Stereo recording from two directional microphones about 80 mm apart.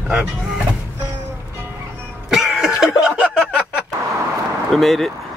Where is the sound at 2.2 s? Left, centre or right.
Centre.